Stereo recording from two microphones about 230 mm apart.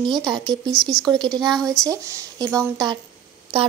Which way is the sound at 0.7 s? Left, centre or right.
Centre.